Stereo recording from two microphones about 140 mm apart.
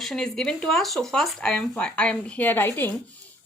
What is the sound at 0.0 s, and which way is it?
Speech, 5° left (ahead or behind).